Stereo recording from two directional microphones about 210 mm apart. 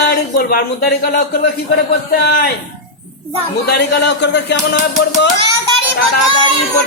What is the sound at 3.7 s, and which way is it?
A man's voice, 55° left (ahead or behind).